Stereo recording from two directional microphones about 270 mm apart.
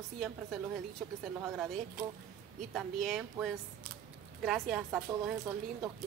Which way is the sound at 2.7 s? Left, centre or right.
Centre.